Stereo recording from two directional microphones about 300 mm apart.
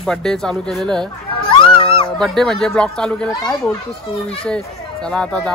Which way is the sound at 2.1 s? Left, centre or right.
Centre.